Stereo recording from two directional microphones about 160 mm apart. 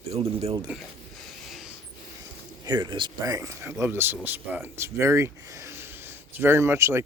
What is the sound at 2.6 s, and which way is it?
Speech, 30° right (ahead or behind).